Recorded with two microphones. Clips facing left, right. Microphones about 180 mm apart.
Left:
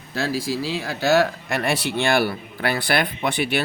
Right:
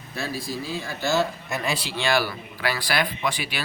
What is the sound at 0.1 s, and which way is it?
Speech, 90° left.